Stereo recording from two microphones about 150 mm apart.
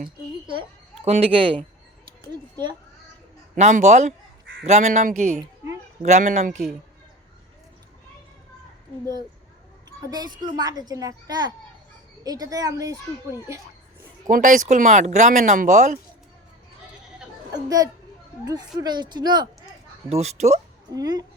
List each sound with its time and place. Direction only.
1.0 s a child's voice: 40° right (ahead or behind)
3.5 s speech: 50° right (ahead or behind)
10.1 s speech: 25° right (ahead or behind)
14.3 s speech: 60° right (ahead or behind)
17.5 s speech: 25° right (ahead or behind)
20.1 s speech: 45° right (ahead or behind)
20.9 s speech: 25° right (ahead or behind)